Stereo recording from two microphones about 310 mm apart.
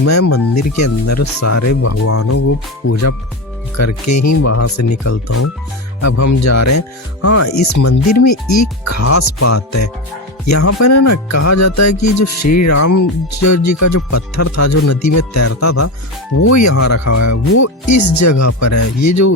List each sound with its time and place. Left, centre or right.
0.0 s speech: left
16.4 s speech: left